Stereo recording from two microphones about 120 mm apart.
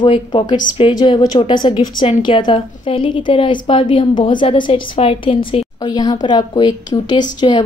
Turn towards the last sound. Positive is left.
turn(degrees=45)  # may be behind; listen again after turning